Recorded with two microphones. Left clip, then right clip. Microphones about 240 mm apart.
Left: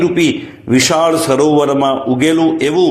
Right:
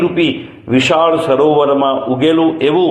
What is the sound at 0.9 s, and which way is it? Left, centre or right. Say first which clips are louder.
A man's voice: right 2 dB; left.